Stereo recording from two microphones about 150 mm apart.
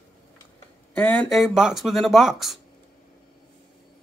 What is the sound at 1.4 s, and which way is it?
Speech, 5° right (ahead or behind).